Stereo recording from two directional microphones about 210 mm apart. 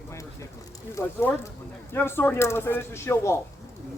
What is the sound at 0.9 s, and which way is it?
Speech, 10° left (ahead or behind).